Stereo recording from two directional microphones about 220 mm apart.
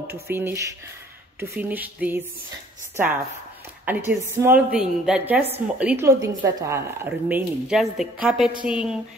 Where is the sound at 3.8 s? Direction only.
10° right (ahead or behind).